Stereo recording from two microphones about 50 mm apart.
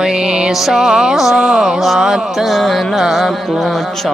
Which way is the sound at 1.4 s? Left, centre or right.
Centre.